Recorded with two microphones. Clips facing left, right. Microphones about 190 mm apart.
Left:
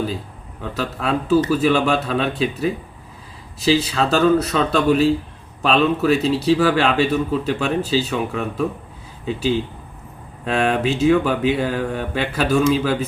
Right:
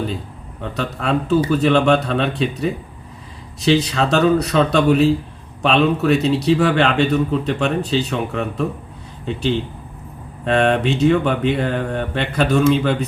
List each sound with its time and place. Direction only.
0.6 s speech: centre (ahead or behind)